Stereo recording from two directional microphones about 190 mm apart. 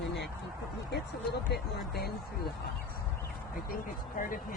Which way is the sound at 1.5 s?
55° left (ahead or behind).